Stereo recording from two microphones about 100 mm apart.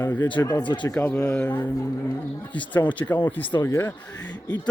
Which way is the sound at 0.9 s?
20° left (ahead or behind).